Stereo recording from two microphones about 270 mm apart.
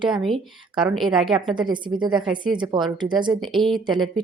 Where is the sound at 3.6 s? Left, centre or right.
Centre.